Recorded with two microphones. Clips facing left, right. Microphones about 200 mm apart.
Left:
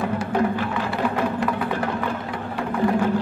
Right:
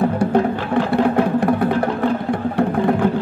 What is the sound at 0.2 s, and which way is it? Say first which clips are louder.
Music: right 5 dB; 60° right (ahead or behind).